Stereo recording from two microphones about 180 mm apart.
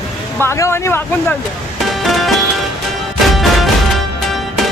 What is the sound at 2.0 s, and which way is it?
Music, centre (ahead or behind).